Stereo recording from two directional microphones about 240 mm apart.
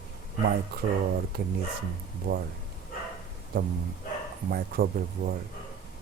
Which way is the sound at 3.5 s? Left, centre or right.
Right.